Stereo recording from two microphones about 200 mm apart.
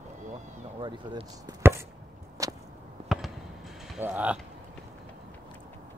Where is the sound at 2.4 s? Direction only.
15° right (ahead or behind).